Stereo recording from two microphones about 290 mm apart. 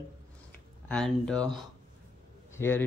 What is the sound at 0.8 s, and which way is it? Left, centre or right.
Speech, centre.